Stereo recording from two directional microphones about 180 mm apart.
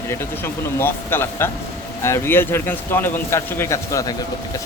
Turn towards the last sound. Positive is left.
turn(degrees=15)  # may be behind; listen again after turning